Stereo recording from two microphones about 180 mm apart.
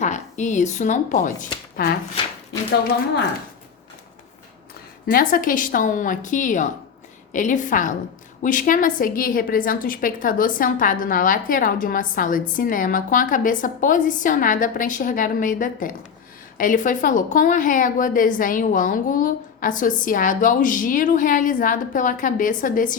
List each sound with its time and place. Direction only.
0.0 s a woman's voice: 40° left (ahead or behind)
5.1 s a woman's voice: 50° left (ahead or behind)